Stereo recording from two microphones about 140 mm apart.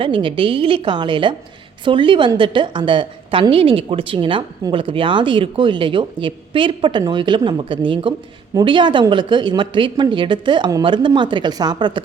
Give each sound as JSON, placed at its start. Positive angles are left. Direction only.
{"t": 0.0, "sound": "a woman's voice", "side_deg": -40}